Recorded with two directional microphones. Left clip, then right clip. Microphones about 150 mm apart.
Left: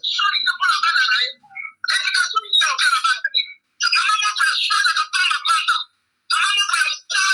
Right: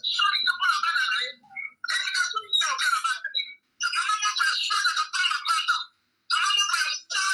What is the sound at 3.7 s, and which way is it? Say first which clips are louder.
Music: left 8 dB; 25° left (ahead or behind).